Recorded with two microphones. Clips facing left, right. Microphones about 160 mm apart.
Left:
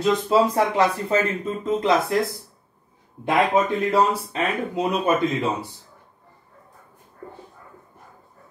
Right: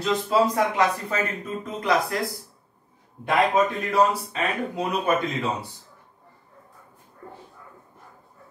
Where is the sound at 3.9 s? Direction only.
25° left (ahead or behind).